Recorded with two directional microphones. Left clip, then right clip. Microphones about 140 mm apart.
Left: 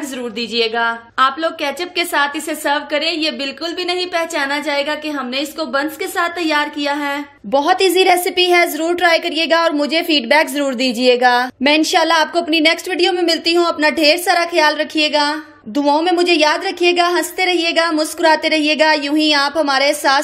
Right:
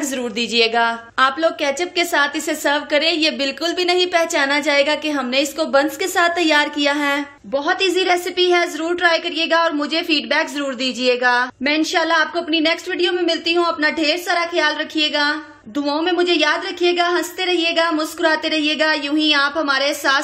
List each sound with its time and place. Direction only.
0.4 s a woman's voice: 10° right (ahead or behind)
7.5 s a woman's voice: 40° left (ahead or behind)